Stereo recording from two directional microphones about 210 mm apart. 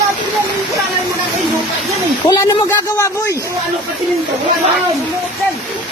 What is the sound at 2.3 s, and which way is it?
Speech, 15° left (ahead or behind).